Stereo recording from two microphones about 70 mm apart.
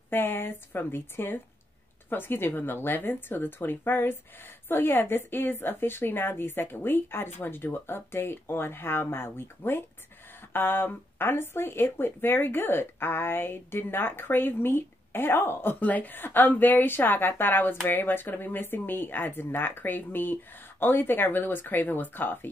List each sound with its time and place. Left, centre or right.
0.1 s speech: left